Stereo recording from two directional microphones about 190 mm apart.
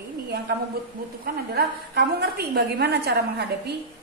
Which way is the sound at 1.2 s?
55° right (ahead or behind).